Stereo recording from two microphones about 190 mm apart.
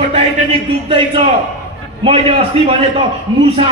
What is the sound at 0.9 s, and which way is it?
A man's voice, 25° right (ahead or behind).